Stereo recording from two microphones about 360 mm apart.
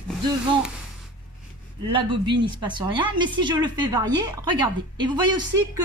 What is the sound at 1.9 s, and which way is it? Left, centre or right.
A woman's voice, centre.